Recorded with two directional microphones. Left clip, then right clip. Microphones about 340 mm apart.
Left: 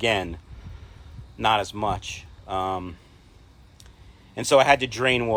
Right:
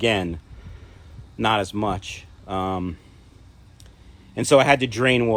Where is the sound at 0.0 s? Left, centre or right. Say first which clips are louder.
Right 2 dB; centre.